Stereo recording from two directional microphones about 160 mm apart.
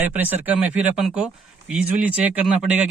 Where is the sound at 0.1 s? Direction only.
10° right (ahead or behind).